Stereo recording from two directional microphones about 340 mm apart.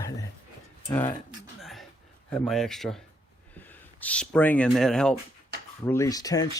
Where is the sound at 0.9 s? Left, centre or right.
Centre.